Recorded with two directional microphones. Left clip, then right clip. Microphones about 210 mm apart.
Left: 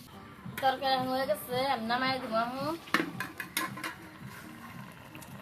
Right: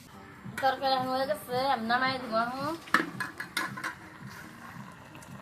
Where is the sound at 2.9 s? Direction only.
25° left (ahead or behind).